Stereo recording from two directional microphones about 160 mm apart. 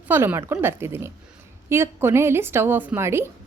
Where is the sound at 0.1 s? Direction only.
15° right (ahead or behind).